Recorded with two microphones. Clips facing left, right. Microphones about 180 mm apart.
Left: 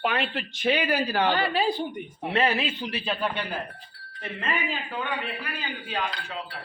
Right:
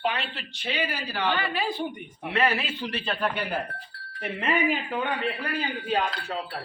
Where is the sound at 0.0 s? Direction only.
50° left (ahead or behind); by 2.6 s 25° left (ahead or behind).